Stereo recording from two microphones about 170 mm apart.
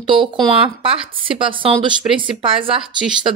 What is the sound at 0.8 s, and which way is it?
Speech, 30° right (ahead or behind).